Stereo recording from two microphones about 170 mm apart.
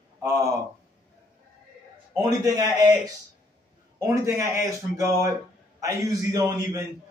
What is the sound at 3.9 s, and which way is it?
A man's voice, 20° right (ahead or behind).